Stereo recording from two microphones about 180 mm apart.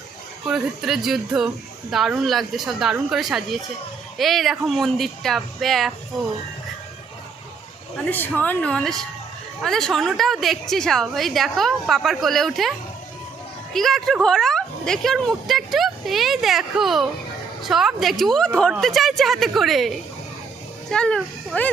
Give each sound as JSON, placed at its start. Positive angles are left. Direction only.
{"t": 0.4, "sound": "a woman's voice", "side_deg": -5}
{"t": 8.0, "sound": "a woman's voice", "side_deg": 10}
{"t": 13.7, "sound": "a woman's voice", "side_deg": 0}
{"t": 20.9, "sound": "a woman's voice", "side_deg": 5}